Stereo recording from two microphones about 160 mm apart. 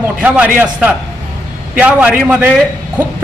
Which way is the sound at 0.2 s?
10° right (ahead or behind).